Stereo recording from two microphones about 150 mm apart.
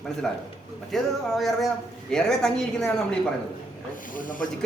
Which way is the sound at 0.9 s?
Centre (ahead or behind).